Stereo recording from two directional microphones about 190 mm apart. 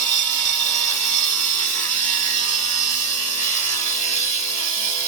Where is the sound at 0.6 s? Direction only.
5° left (ahead or behind).